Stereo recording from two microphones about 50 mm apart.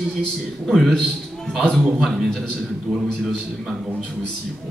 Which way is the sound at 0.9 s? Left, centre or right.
Centre.